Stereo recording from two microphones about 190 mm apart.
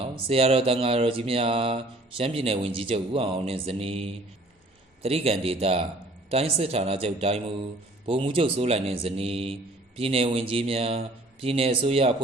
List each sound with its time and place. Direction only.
0.0 s speech: 30° right (ahead or behind)